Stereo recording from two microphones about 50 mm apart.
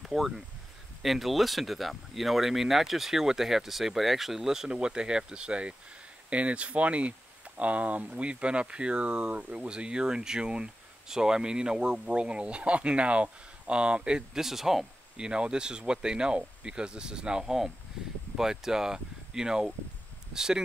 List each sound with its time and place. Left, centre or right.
0.0 s a sound: centre
1.0 s speech: centre
4.6 s speech: centre
14.4 s speech: centre